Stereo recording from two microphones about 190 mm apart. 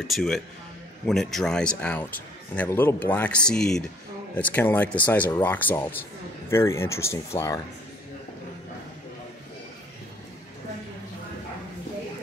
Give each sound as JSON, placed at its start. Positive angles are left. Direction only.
{"t": 0.0, "sound": "speech", "side_deg": 0}